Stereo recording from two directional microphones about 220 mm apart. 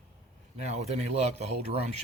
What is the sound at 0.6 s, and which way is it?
Speech, 30° right (ahead or behind).